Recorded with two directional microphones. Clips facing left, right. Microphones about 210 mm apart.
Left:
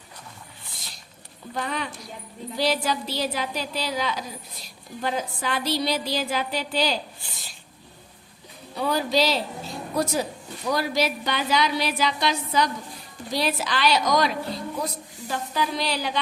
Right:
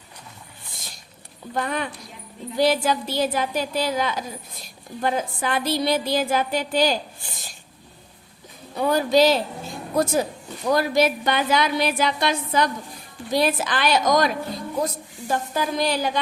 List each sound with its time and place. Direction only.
1.5 s a woman's voice: 50° right (ahead or behind)
8.7 s a woman's voice: 50° right (ahead or behind)